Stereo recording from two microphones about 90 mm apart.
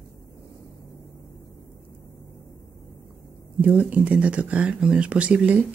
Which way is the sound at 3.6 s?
20° right (ahead or behind).